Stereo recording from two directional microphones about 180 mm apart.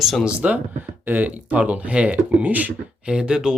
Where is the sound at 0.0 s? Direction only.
Centre (ahead or behind).